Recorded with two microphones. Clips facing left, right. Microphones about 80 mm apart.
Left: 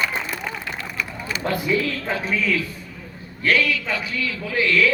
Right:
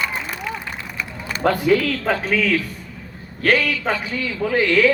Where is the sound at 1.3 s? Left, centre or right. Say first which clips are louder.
Right 6 dB; right.